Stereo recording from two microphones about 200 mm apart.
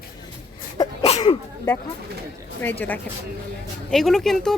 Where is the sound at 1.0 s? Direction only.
30° left (ahead or behind).